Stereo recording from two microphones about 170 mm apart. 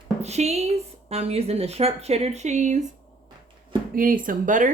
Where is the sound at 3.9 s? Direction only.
55° right (ahead or behind).